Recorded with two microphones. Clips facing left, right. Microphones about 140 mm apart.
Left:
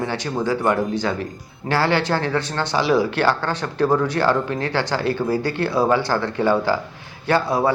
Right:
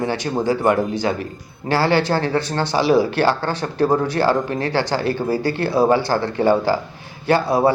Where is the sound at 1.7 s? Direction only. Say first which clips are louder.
Right 2 dB; 35° right (ahead or behind).